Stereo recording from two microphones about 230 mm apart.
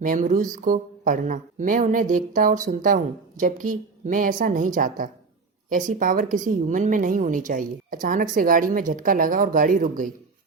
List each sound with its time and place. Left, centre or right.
0.0 s speech: right